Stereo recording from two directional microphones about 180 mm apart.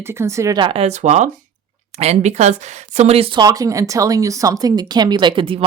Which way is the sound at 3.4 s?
20° right (ahead or behind).